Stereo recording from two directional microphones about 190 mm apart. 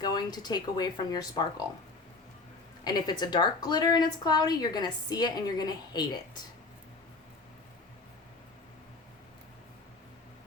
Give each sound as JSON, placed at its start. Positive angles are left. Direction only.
{"t": 0.0, "sound": "a woman's voice", "side_deg": 20}
{"t": 2.8, "sound": "a woman's voice", "side_deg": 20}